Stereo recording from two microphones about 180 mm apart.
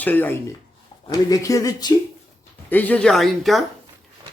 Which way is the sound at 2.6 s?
10° left (ahead or behind).